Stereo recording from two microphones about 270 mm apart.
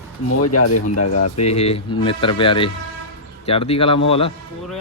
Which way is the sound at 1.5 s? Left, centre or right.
Left.